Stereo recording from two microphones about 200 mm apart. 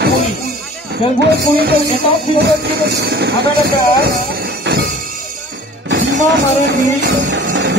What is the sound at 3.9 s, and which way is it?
Train, 55° right (ahead or behind).